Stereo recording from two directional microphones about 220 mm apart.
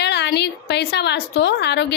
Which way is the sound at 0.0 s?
50° left (ahead or behind).